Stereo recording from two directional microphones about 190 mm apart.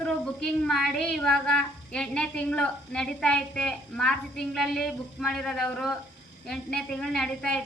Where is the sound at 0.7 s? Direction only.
Centre (ahead or behind).